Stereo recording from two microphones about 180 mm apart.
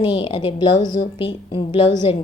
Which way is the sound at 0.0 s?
25° left (ahead or behind).